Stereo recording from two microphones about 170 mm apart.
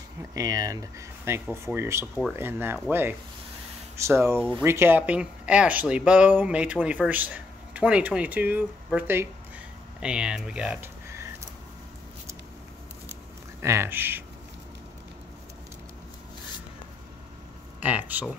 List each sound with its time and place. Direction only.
0.2 s speech: 20° right (ahead or behind)
13.6 s speech: 15° right (ahead or behind)
17.7 s speech: 10° right (ahead or behind)